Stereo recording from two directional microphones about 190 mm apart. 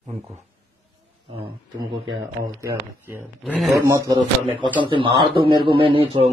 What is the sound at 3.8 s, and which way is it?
Speech, 15° right (ahead or behind).